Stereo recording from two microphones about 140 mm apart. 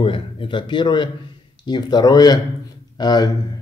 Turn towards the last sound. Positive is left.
turn(degrees=30)  # may be behind; listen again after turning